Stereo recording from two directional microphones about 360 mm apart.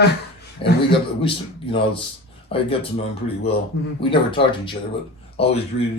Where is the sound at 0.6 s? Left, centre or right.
Centre.